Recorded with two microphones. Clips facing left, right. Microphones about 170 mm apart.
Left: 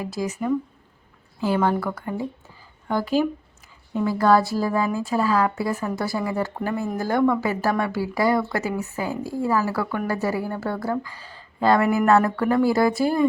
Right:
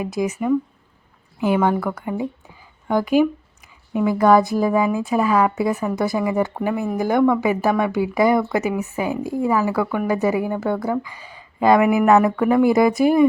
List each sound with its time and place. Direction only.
0.0 s speech: 20° right (ahead or behind)
1.4 s speech: 15° right (ahead or behind)